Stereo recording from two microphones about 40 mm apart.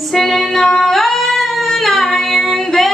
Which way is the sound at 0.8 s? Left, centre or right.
Centre.